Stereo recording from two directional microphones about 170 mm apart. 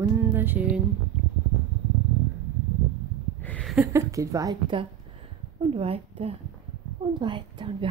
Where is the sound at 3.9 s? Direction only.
20° right (ahead or behind).